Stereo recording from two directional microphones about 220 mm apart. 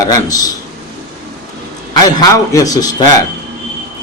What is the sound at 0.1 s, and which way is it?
Speech, 15° left (ahead or behind).